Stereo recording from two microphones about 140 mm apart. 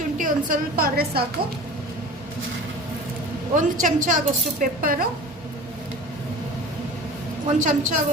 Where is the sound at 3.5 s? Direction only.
65° right (ahead or behind).